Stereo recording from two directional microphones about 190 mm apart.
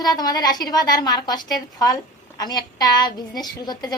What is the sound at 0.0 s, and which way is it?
A woman's voice, 20° left (ahead or behind).